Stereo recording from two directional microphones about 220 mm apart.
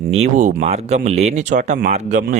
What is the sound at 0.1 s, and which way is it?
Speech, 30° right (ahead or behind).